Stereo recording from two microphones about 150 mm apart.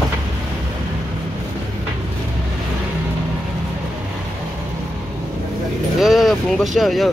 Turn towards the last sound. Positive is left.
turn(degrees=0)  # may be behind; listen again after turning